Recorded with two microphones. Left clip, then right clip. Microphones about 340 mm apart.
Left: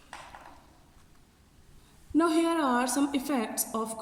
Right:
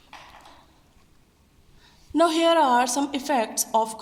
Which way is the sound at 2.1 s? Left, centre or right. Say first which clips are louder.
Right 7 dB; right.